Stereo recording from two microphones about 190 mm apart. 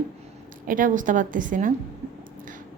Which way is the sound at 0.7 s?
45° right (ahead or behind).